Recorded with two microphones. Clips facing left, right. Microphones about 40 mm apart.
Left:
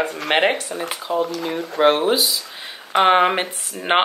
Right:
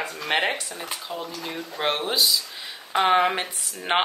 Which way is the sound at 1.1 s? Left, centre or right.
Left.